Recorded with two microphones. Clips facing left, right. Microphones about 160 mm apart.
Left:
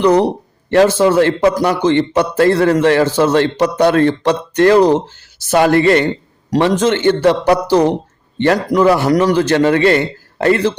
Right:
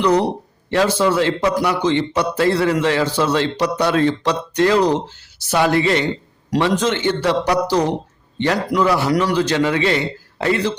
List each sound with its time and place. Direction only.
0.7 s a man's voice: 50° left (ahead or behind)